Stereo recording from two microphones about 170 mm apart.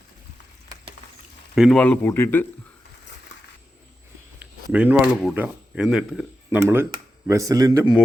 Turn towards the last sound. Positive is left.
turn(degrees=-20)  # may be behind; listen again after turning